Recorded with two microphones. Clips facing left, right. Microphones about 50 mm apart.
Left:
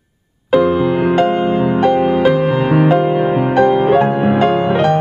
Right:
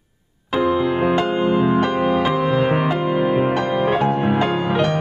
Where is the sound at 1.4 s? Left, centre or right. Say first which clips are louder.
Left 2 dB; centre.